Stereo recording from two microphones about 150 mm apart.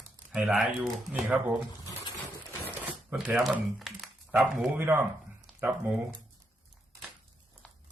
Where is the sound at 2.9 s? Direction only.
5° right (ahead or behind).